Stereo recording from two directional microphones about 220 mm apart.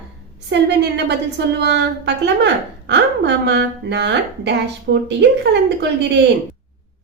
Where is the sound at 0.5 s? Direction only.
50° right (ahead or behind).